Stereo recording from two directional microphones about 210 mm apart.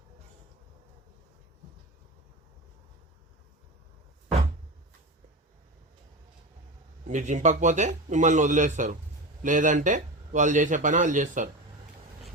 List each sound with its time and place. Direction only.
7.1 s a man's voice: 35° right (ahead or behind)